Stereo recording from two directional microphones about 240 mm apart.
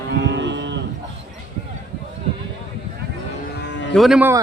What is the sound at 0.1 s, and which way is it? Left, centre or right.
Moo, right.